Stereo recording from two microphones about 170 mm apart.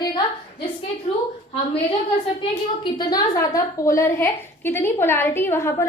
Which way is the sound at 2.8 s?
25° left (ahead or behind).